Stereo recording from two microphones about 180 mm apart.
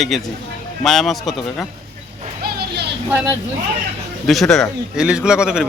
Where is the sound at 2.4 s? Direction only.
65° right (ahead or behind).